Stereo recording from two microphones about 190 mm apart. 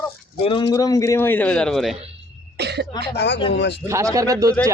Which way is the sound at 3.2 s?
65° left (ahead or behind).